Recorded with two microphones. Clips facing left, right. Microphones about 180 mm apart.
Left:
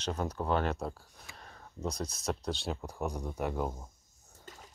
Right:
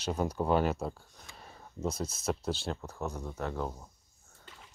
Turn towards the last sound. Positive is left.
turn(degrees=45)  # may be behind; listen again after turning